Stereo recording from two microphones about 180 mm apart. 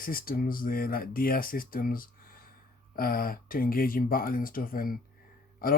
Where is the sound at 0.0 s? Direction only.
50° left (ahead or behind).